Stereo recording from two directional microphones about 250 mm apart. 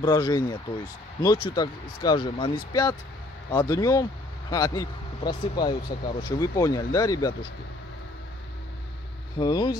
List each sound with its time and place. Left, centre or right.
0.0 s speech: centre
9.4 s speech: centre